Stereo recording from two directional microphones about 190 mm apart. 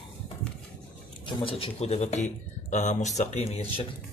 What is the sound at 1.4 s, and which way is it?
Speech, 30° left (ahead or behind).